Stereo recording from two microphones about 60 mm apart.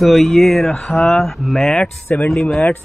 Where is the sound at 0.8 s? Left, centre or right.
Centre.